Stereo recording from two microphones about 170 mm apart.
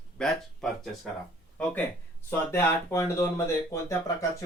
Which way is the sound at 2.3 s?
15° left (ahead or behind).